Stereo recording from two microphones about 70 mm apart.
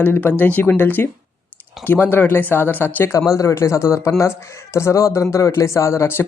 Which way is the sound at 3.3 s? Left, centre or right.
Left.